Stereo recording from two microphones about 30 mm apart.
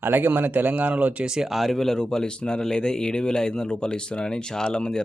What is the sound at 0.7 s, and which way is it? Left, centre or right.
Speech, right.